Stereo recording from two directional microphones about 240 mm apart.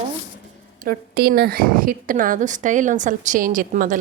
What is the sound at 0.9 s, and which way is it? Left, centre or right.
A woman's voice, right.